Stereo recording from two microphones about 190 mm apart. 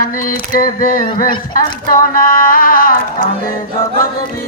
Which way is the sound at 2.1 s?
45° left (ahead or behind).